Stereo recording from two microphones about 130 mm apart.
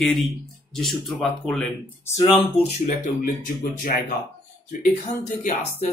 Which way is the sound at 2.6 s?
65° left (ahead or behind).